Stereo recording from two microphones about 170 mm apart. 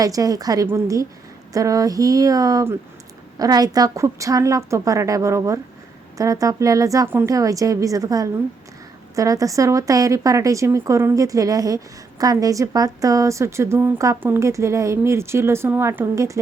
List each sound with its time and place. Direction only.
0.0 s a woman's voice: 20° right (ahead or behind)